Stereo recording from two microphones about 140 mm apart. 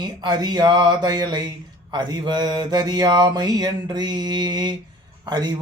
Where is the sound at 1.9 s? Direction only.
30° right (ahead or behind).